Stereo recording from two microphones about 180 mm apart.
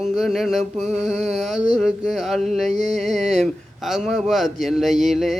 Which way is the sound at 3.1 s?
40° right (ahead or behind).